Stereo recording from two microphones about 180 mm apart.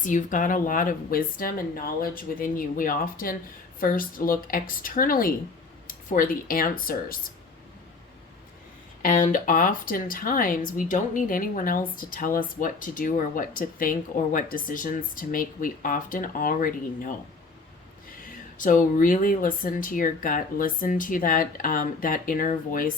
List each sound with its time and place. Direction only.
0.0 s speech: 45° left (ahead or behind)
9.0 s speech: 50° left (ahead or behind)
18.2 s speech: 45° left (ahead or behind)